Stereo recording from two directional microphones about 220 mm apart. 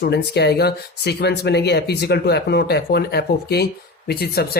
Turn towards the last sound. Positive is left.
turn(degrees=45)  # may be behind; listen again after turning